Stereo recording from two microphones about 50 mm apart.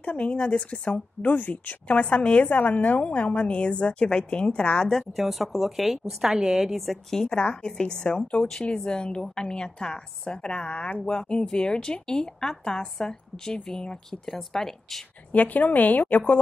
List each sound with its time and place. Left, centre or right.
0.0 s a woman's voice: left
1.3 s speech: left
1.9 s a woman's voice: left
2.4 s a woman's voice: left; by 5.0 s centre
5.1 s a woman's voice: centre
7.1 s a woman's voice: centre
7.3 s a woman's voice: left
15.3 s speech: left